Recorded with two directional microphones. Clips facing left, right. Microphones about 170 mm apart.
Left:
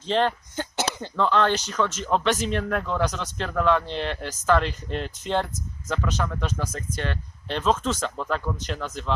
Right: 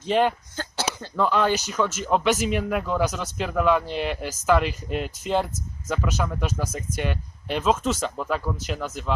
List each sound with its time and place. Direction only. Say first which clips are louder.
0.1 s speech: right 2 dB; 10° right (ahead or behind)
0.5 s throat clearing: left 2 dB; 20° left (ahead or behind)
1.1 s speech: even; 10° right (ahead or behind)